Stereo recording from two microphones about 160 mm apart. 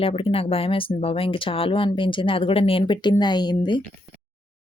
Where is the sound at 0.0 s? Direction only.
35° left (ahead or behind).